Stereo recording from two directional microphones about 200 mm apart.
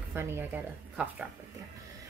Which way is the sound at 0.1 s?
10° right (ahead or behind).